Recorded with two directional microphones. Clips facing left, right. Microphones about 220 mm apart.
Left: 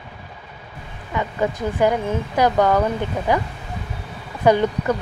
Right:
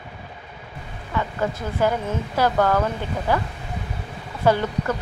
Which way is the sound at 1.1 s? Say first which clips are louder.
Left 2 dB; 15° left (ahead or behind).